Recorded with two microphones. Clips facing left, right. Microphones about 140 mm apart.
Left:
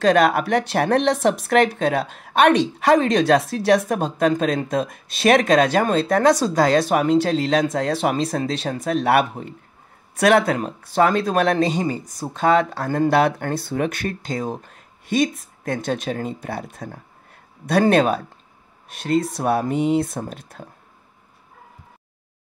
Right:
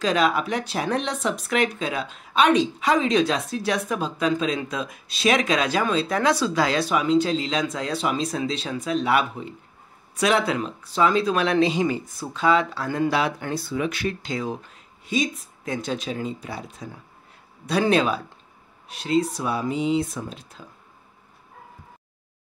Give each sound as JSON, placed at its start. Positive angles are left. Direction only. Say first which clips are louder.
{"t": 0.0, "sound": "speech", "louder": "left 5 dB", "side_deg": 55}